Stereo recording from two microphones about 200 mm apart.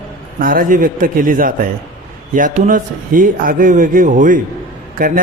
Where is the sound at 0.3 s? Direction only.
45° right (ahead or behind).